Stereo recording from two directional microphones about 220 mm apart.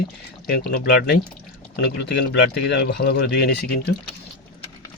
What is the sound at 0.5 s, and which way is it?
Speech, 45° left (ahead or behind).